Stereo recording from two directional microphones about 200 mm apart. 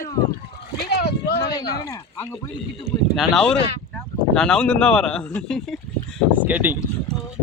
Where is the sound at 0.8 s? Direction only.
55° left (ahead or behind).